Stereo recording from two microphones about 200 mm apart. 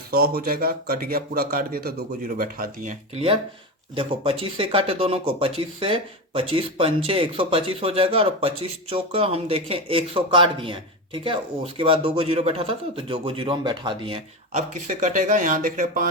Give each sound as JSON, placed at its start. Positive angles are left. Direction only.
{"t": 0.1, "sound": "a man's voice", "side_deg": -50}
{"t": 3.9, "sound": "speech", "side_deg": -25}
{"t": 15.0, "sound": "speech", "side_deg": -40}